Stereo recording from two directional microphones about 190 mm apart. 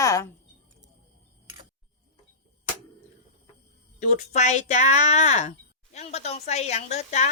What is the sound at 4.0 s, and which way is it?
Speech, 40° left (ahead or behind).